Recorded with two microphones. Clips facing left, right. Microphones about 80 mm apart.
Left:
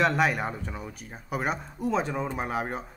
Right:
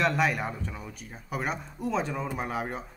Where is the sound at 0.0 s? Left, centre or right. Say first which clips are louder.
Left 2 dB; centre.